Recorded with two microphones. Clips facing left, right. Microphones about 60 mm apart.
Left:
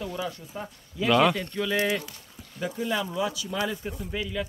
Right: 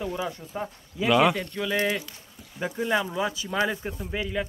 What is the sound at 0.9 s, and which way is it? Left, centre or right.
Speech, centre.